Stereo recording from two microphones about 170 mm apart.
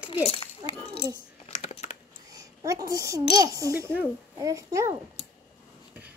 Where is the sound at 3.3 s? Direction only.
20° right (ahead or behind).